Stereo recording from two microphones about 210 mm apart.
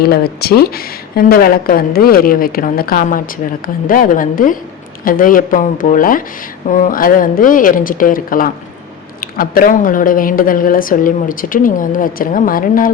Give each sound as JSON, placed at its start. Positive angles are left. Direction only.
{"t": 0.0, "sound": "a woman's voice", "side_deg": 50}